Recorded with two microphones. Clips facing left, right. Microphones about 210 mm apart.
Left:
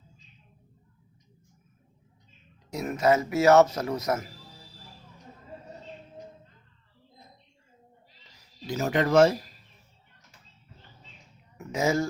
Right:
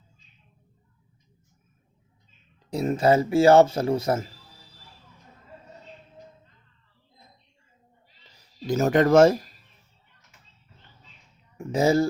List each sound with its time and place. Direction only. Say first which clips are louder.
2.6 s a man's voice: right 3 dB; 30° right (ahead or behind)
8.6 s speech: right 6 dB; 45° right (ahead or behind)
11.5 s a sound: right 5 dB; 30° right (ahead or behind)